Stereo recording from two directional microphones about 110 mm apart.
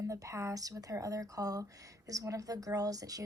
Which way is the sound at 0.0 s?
30° right (ahead or behind).